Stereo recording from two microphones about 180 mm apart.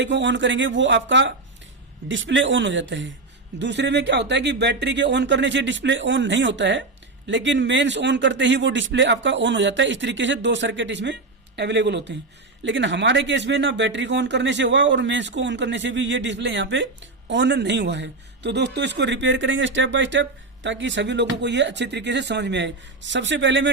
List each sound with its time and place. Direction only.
0.0 s speech: 80° right
3.6 s speech: 75° right (ahead or behind)
12.6 s speech: 90° right